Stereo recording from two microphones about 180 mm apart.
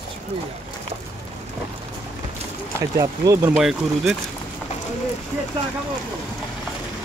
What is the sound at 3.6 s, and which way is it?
Speech, centre (ahead or behind).